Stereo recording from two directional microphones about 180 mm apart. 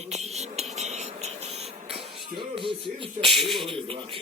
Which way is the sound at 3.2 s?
Centre (ahead or behind).